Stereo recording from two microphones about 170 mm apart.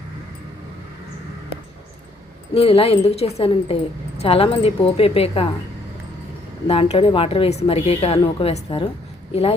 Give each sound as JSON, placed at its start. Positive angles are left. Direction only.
{"t": 2.6, "sound": "speech", "side_deg": 35}
{"t": 6.7, "sound": "speech", "side_deg": 35}